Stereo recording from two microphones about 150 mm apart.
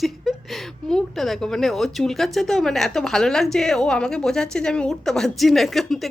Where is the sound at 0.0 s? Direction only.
Centre (ahead or behind).